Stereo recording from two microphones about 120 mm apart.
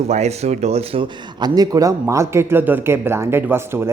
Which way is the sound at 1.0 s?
35° right (ahead or behind).